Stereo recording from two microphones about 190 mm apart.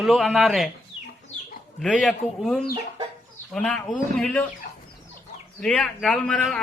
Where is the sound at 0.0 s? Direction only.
Centre (ahead or behind).